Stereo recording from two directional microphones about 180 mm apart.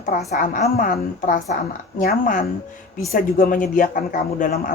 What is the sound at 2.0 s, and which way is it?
A woman's voice, 50° left (ahead or behind).